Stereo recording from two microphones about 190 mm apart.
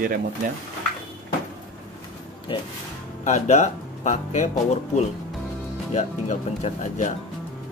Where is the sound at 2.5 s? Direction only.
25° left (ahead or behind).